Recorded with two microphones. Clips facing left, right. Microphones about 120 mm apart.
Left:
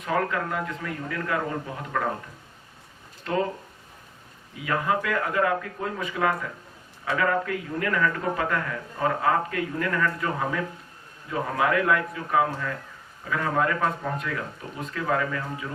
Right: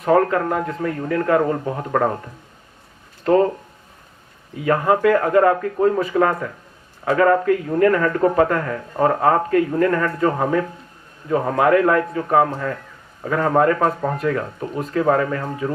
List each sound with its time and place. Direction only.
0.0 s a man's voice: 40° right (ahead or behind)
3.2 s a man's voice: 40° right (ahead or behind)
4.6 s a man's voice: 40° right (ahead or behind)